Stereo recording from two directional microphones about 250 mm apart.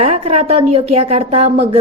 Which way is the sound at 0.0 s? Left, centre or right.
Right.